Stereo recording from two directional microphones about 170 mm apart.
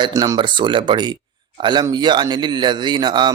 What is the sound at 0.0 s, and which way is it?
A man's voice, 20° right (ahead or behind).